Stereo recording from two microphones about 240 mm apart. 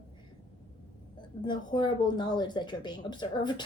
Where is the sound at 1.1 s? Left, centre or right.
Centre.